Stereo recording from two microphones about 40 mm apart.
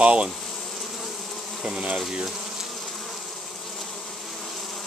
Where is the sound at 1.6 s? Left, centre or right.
Centre.